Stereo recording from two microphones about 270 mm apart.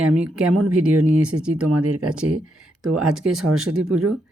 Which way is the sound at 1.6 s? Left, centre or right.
Right.